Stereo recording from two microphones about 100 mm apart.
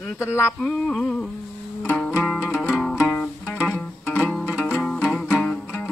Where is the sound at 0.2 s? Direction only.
25° left (ahead or behind).